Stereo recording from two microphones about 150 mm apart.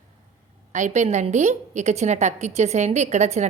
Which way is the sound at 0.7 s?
55° right (ahead or behind).